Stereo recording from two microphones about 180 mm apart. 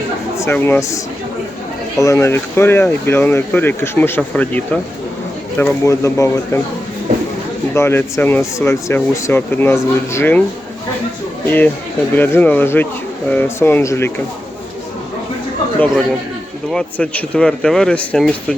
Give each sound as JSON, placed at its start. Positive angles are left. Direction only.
{"t": 0.3, "sound": "speech", "side_deg": 15}
{"t": 7.7, "sound": "speech", "side_deg": 15}
{"t": 11.4, "sound": "speech", "side_deg": 10}
{"t": 16.7, "sound": "speech", "side_deg": 5}